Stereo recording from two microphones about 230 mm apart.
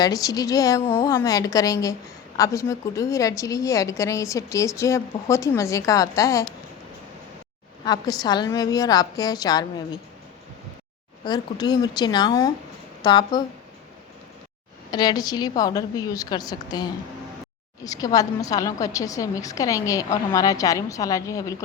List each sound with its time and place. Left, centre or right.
0.0 s a woman's voice: centre
7.9 s a woman's voice: centre
11.3 s a woman's voice: centre
14.8 s a woman's voice: centre